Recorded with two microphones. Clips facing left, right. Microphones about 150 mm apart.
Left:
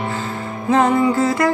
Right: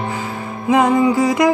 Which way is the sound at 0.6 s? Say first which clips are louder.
Right 1 dB; 10° right (ahead or behind).